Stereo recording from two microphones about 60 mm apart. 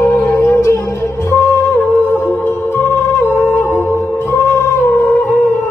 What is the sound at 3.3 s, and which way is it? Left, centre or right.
Music, left.